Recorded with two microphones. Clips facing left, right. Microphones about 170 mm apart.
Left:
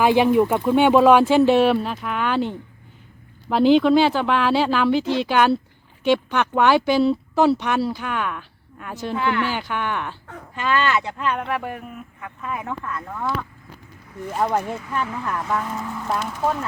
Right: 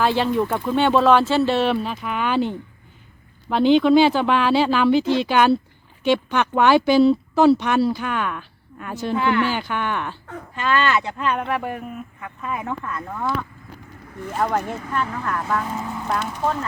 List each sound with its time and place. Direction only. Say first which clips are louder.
0.0 s speech: left 4 dB; 15° left (ahead or behind); by 13.3 s 5° right (ahead or behind)
14.3 s speech: even; 10° left (ahead or behind)